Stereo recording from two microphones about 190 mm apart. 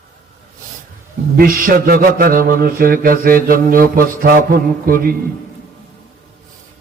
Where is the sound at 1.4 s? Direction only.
50° right (ahead or behind).